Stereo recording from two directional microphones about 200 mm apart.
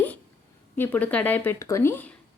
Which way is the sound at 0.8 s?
10° left (ahead or behind).